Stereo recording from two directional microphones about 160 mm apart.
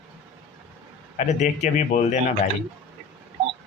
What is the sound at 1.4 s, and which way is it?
Speech, 45° left (ahead or behind).